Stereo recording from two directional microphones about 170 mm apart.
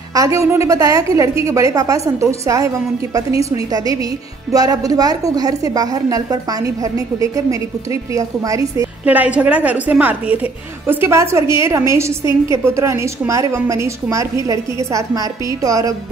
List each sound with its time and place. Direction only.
0.1 s a woman's voice: 20° right (ahead or behind)
9.0 s a woman's voice: 10° right (ahead or behind)